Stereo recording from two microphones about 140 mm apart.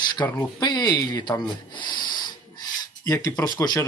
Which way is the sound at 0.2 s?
20° left (ahead or behind).